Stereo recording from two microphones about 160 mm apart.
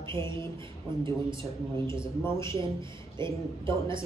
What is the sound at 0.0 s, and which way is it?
Speech, 15° left (ahead or behind).